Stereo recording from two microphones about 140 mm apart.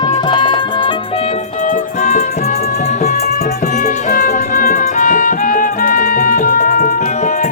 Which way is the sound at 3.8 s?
75° left (ahead or behind).